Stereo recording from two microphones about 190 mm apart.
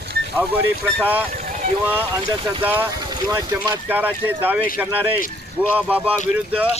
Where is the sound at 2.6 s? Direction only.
10° right (ahead or behind).